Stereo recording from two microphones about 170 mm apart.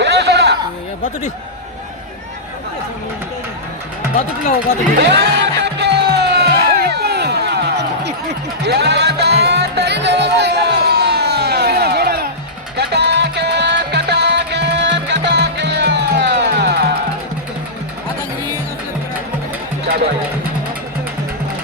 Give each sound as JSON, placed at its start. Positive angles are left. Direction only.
{"t": 0.0, "sound": "a sound", "side_deg": -80}
{"t": 4.9, "sound": "music", "side_deg": -80}
{"t": 12.7, "sound": "music", "side_deg": -75}